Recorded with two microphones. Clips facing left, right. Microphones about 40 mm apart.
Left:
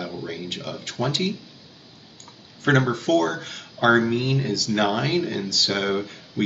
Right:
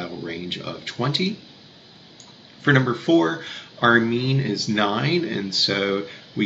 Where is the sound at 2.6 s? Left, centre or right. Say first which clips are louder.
Right 1 dB; centre.